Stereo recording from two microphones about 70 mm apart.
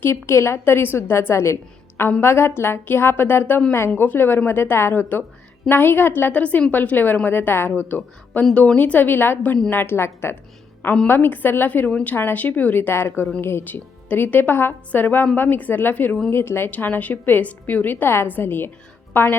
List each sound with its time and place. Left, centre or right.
0.0 s a woman's voice: left
11.9 s a woman's voice: centre
12.1 s a woman's voice: left
16.7 s a woman's voice: left